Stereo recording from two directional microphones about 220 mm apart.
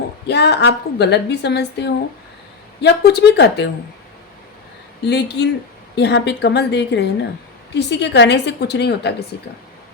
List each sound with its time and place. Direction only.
0.3 s a woman's voice: 50° left (ahead or behind)
5.0 s a woman's voice: 50° left (ahead or behind)